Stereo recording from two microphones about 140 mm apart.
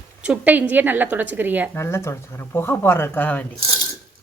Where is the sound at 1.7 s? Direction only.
20° left (ahead or behind).